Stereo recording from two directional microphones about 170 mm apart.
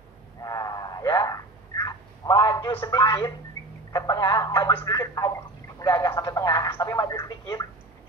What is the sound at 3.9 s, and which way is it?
Telephone, 25° left (ahead or behind).